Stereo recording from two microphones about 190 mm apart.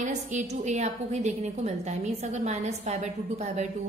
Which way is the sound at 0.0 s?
40° right (ahead or behind).